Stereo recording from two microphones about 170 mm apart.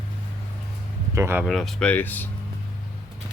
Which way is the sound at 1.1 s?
15° right (ahead or behind).